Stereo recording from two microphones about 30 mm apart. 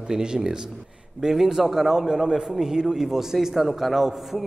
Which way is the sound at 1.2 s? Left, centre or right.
Centre.